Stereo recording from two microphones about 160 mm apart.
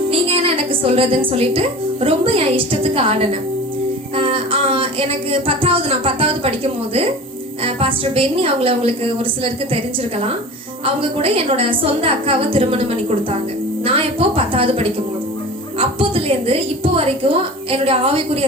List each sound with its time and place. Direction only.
0.1 s a woman's voice: 35° right (ahead or behind)
7.6 s a woman's voice: 35° right (ahead or behind)
10.8 s a woman's voice: 35° right (ahead or behind)